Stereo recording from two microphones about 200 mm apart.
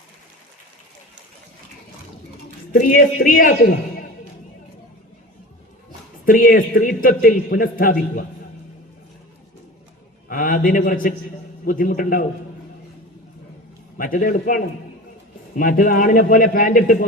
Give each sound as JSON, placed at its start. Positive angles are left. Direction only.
{"t": 2.7, "sound": "a man's voice", "side_deg": 45}
{"t": 6.2, "sound": "a man's voice", "side_deg": 45}
{"t": 10.2, "sound": "a man's voice", "side_deg": 45}
{"t": 14.0, "sound": "a man's voice", "side_deg": 45}